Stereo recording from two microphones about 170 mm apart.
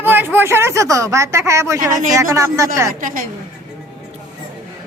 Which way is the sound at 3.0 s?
50° right (ahead or behind).